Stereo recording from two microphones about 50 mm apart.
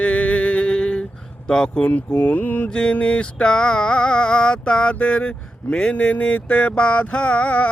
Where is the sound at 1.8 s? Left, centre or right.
Left.